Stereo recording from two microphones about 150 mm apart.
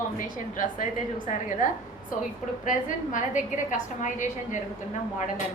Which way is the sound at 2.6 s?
60° left (ahead or behind).